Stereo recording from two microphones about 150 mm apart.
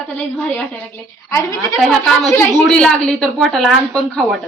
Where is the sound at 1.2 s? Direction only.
20° left (ahead or behind).